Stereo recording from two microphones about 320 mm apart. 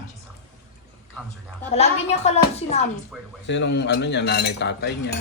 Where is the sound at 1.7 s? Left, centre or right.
Centre.